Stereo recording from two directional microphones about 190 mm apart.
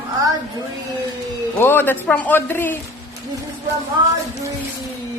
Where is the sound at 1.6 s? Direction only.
10° left (ahead or behind).